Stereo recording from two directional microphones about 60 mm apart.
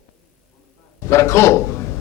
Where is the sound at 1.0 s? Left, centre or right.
Left.